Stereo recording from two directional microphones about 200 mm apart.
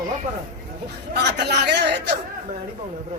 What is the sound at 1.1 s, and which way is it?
A man's voice, 55° right (ahead or behind).